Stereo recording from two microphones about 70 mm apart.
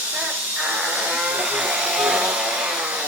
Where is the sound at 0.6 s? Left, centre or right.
Right.